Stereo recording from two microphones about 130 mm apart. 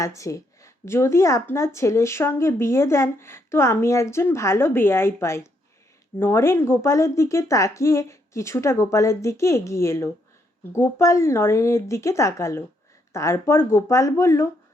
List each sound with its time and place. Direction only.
0.0 s speech: 25° left (ahead or behind)